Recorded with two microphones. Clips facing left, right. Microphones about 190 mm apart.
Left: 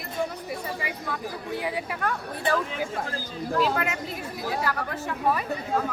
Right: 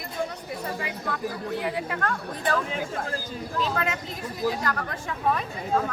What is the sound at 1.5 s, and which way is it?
Speech, 15° left (ahead or behind).